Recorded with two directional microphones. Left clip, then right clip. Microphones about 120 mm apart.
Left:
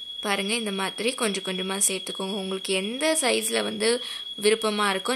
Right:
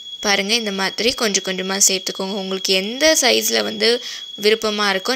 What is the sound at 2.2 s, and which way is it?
Speech, 20° right (ahead or behind).